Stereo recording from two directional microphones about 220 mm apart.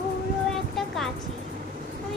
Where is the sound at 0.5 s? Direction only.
Centre (ahead or behind).